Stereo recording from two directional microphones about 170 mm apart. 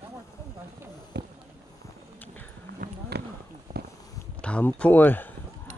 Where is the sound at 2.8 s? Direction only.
75° right (ahead or behind).